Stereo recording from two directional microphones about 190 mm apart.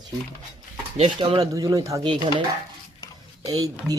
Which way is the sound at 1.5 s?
15° right (ahead or behind).